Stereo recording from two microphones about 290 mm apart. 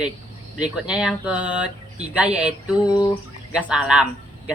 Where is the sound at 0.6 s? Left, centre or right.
Centre.